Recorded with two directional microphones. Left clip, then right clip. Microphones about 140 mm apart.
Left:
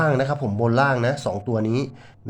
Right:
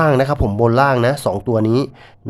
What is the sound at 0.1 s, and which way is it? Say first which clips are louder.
Speech: right 7 dB; 30° right (ahead or behind).